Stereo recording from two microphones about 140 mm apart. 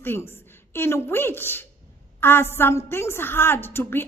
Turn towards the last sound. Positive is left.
turn(degrees=15)  # may be behind; listen again after turning